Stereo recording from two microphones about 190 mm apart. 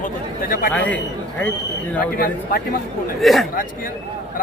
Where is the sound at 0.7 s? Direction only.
10° left (ahead or behind).